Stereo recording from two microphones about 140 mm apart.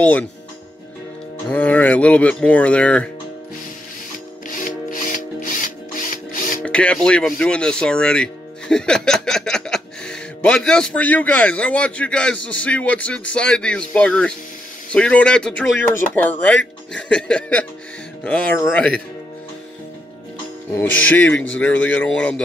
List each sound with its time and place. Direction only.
0.0 s speech: 10° left (ahead or behind)
1.5 s speech: 10° left (ahead or behind)
4.5 s music: 70° left (ahead or behind)
6.6 s speech: 10° left (ahead or behind)
18.2 s music: 10° left (ahead or behind)
18.7 s speech: 5° left (ahead or behind)
20.7 s speech: 10° left (ahead or behind)